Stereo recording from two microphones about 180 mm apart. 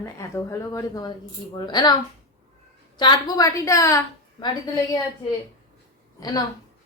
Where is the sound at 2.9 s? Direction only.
20° left (ahead or behind).